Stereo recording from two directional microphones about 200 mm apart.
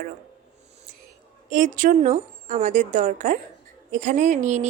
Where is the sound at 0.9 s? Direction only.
40° right (ahead or behind).